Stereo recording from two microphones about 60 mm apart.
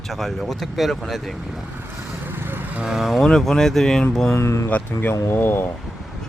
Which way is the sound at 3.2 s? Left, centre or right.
Centre.